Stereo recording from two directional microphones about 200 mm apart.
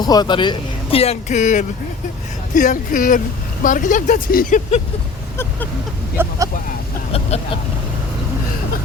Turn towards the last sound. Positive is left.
turn(degrees=30)  # may be behind; listen again after turning